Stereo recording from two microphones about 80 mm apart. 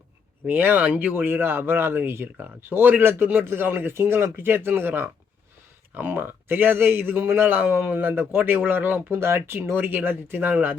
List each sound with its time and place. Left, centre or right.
0.4 s a man's voice: right